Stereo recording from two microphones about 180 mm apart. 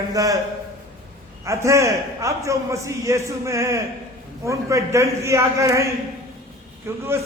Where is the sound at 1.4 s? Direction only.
15° right (ahead or behind).